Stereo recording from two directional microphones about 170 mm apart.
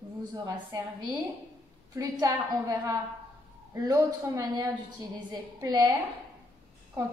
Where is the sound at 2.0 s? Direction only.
20° right (ahead or behind).